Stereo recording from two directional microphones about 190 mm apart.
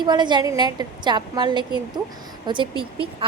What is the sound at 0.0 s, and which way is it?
A woman's voice, 25° right (ahead or behind).